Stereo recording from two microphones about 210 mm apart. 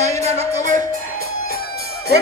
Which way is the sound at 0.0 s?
30° right (ahead or behind).